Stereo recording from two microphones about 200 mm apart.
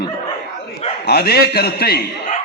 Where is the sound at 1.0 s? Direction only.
50° left (ahead or behind).